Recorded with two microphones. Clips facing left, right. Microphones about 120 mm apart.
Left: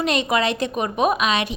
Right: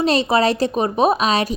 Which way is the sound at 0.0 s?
35° right (ahead or behind).